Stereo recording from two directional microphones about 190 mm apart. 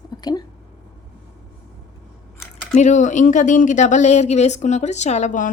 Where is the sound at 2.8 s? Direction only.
40° left (ahead or behind).